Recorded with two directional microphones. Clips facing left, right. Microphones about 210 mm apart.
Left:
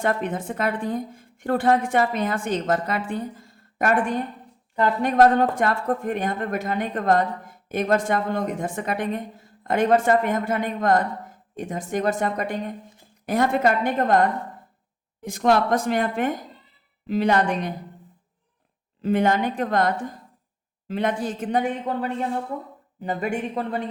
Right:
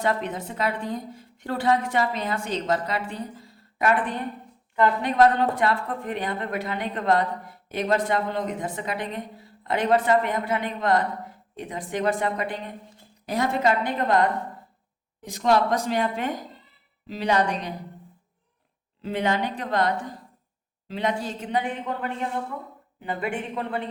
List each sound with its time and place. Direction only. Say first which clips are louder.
0.0 s speech: left 2 dB; 50° left (ahead or behind)
19.0 s speech: left 5 dB; 50° left (ahead or behind)
23.0 s speech: left 3 dB; 40° left (ahead or behind)